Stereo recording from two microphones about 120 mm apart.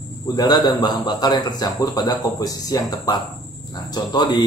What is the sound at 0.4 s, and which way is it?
Speech, 35° left (ahead or behind).